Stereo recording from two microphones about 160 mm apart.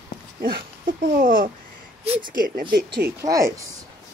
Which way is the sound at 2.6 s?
30° right (ahead or behind).